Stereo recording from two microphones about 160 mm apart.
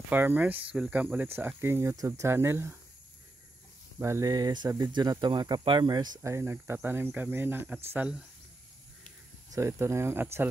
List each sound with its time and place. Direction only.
0.1 s speech: 10° right (ahead or behind)
4.0 s a sound: 20° right (ahead or behind)
4.9 s speech: 25° right (ahead or behind); by 8.2 s 10° right (ahead or behind)
9.5 s speech: 15° right (ahead or behind)